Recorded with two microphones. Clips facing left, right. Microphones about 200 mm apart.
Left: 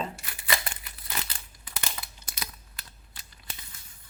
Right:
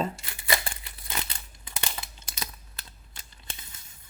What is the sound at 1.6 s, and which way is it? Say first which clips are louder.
Crumpling: right 1 dB; 25° right (ahead or behind).